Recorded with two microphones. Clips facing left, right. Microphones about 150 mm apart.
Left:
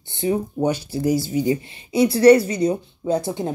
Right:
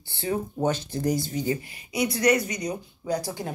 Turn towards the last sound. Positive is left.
turn(degrees=20)  # may be behind; listen again after turning